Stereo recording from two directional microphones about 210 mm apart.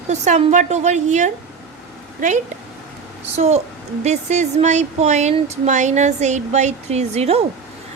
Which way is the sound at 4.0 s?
35° right (ahead or behind).